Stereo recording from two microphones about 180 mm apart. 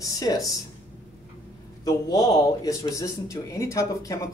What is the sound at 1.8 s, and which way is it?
Speech, 20° left (ahead or behind).